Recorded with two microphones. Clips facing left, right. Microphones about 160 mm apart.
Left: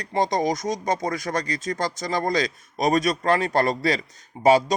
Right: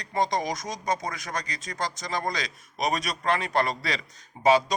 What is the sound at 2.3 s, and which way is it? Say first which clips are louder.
Speech: left 11 dB; 35° left (ahead or behind).